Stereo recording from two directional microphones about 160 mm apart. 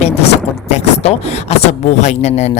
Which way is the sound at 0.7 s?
40° left (ahead or behind).